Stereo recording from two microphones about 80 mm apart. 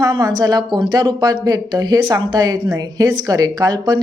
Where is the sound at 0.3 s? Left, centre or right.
Right.